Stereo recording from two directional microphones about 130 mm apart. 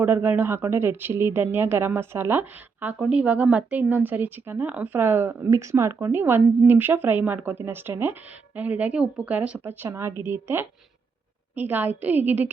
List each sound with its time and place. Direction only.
0.0 s speech: 15° right (ahead or behind)